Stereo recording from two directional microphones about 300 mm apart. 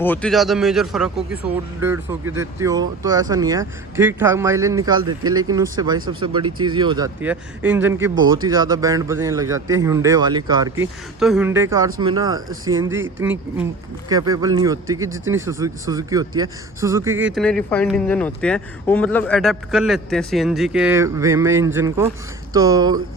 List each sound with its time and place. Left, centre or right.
0.0 s a man's voice: centre
8.1 s speech: right
8.4 s speech: centre
11.2 s speech: centre
15.1 s speech: right
15.4 s a man's voice: centre